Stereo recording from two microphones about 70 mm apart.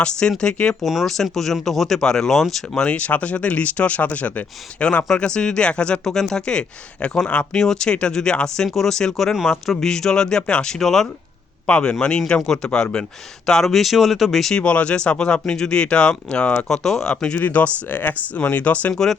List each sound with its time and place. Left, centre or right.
0.0 s speech: centre
0.9 s speech: centre
2.8 s speech: centre
14.5 s speech: centre
17.3 s speech: left